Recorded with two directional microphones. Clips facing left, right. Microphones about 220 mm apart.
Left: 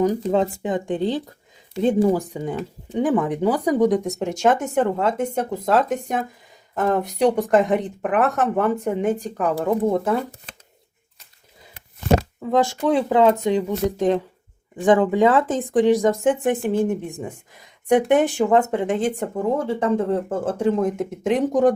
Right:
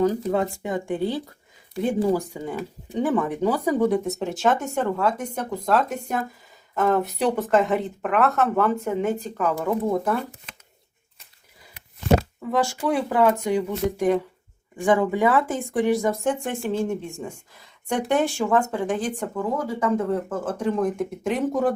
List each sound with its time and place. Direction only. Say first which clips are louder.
0.3 s speech: left 3 dB; 20° left (ahead or behind)
11.7 s a sound: left 1 dB; 50° left (ahead or behind)
12.9 s speech: left 4 dB; 20° left (ahead or behind)